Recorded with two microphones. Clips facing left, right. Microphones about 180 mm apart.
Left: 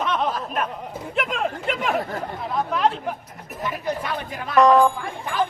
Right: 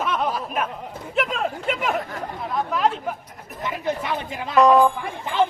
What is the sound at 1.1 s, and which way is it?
Speech, centre (ahead or behind).